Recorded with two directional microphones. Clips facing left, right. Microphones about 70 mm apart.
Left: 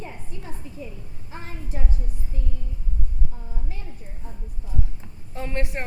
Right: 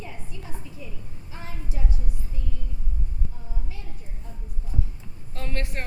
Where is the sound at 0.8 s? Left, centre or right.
Left.